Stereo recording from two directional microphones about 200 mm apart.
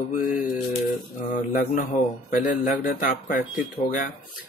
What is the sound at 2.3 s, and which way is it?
Speech, 45° left (ahead or behind).